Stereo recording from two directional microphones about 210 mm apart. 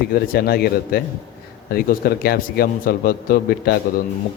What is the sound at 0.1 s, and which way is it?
A man's voice, 45° left (ahead or behind).